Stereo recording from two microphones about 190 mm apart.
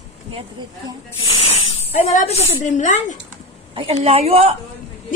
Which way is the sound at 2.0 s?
35° left (ahead or behind).